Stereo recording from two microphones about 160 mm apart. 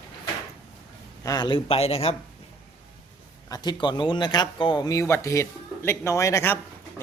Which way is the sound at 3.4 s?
25° left (ahead or behind).